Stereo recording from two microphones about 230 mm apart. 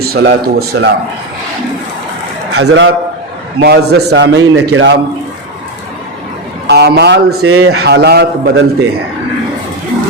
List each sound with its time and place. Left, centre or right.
0.0 s speech: right
2.6 s speech: right
6.7 s speech: right
7.4 s a man's voice: right
7.9 s speech: right